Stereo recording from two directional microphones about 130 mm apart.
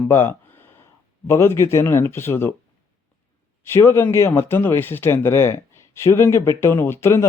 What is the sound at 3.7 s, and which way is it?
Speech, 20° left (ahead or behind).